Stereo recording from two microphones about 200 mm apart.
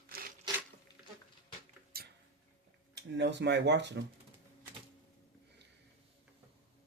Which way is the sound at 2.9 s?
60° right (ahead or behind).